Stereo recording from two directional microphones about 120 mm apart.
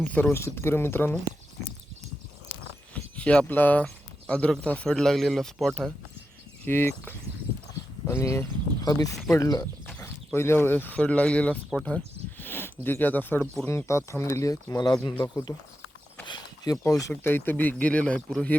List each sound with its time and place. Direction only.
0.0 s speech: 15° left (ahead or behind)
2.9 s speech: 10° left (ahead or behind)
6.7 s speech: 20° left (ahead or behind); by 12.0 s centre (ahead or behind)
12.4 s a sound: 15° left (ahead or behind)
12.8 s speech: 15° left (ahead or behind); by 15.5 s 35° left (ahead or behind)
16.2 s a sound: 40° left (ahead or behind)
16.8 s speech: 25° left (ahead or behind); by 18.5 s 10° left (ahead or behind)